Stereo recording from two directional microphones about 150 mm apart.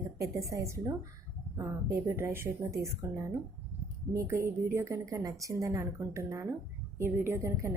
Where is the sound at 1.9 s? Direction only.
15° right (ahead or behind).